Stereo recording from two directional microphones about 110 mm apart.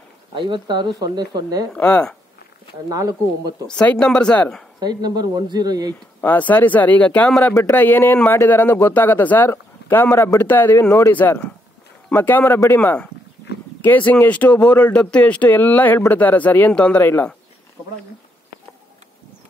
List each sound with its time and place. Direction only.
0.3 s speech: 45° right (ahead or behind)
1.7 s speech: 10° left (ahead or behind)
2.9 s speech: 30° right (ahead or behind)
3.6 s speech: 10° left (ahead or behind)
4.7 s speech: 40° right (ahead or behind)
6.2 s speech: 15° left (ahead or behind)